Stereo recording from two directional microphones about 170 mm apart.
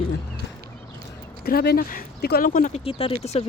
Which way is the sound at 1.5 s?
60° left (ahead or behind).